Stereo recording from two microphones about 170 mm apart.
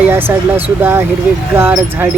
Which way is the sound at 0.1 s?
15° right (ahead or behind).